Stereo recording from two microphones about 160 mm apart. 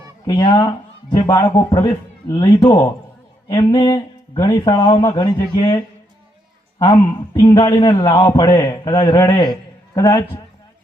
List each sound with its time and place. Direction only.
0.3 s a man's voice: 25° left (ahead or behind)